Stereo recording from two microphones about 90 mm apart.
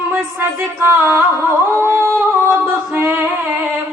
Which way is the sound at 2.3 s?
25° right (ahead or behind).